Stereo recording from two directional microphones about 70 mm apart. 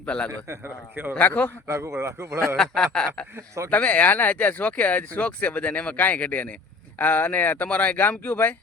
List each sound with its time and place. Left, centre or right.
0.0 s a man's voice: centre
0.3 s a man's voice: right
1.2 s speech: left
1.6 s a man's voice: right
2.6 s a sound: centre
3.3 s speech: right
3.7 s speech: left